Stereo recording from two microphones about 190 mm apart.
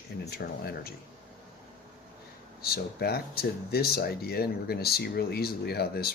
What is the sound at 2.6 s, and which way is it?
Speech, 55° left (ahead or behind).